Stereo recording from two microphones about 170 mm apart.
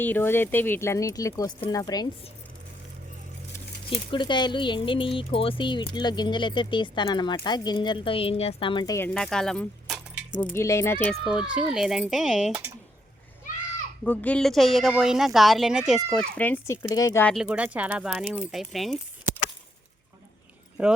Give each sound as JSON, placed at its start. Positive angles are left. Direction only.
{"t": 0.0, "sound": "speech", "side_deg": 10}
{"t": 3.8, "sound": "speech", "side_deg": 30}
{"t": 9.0, "sound": "speech", "side_deg": 5}
{"t": 10.5, "sound": "speech", "side_deg": 15}
{"t": 11.1, "sound": "speech", "side_deg": -5}
{"t": 14.0, "sound": "speech", "side_deg": 10}
{"t": 16.9, "sound": "speech", "side_deg": 20}
{"t": 17.2, "sound": "speech", "side_deg": 0}
{"t": 20.8, "sound": "speech", "side_deg": -5}